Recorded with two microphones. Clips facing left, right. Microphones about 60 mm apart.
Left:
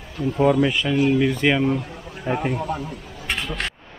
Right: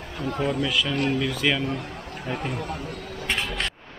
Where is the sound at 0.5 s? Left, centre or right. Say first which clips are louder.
Left 6 dB; left.